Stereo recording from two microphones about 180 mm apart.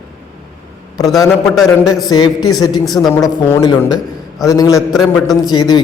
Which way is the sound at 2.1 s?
25° left (ahead or behind).